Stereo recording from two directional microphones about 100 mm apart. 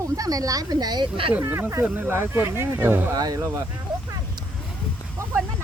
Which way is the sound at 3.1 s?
40° right (ahead or behind).